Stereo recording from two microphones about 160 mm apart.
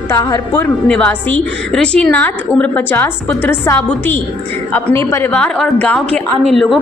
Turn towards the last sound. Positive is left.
turn(degrees=0)  # may be behind; listen again after turning